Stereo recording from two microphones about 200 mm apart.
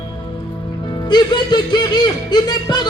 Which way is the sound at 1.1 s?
20° left (ahead or behind).